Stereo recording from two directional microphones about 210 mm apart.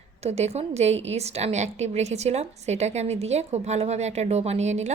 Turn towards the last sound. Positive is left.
turn(degrees=-35)  # may be behind; listen again after turning